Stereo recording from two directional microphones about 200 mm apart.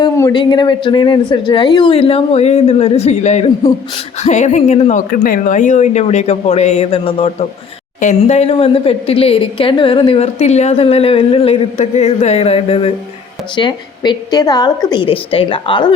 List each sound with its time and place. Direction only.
0.0 s speech: 20° left (ahead or behind)